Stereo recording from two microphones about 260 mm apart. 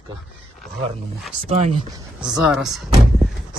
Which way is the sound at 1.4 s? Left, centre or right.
Right.